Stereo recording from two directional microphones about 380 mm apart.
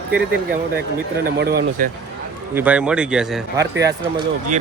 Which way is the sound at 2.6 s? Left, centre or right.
Centre.